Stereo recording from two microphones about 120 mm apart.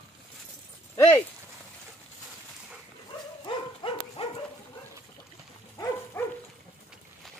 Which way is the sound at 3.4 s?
45° left (ahead or behind).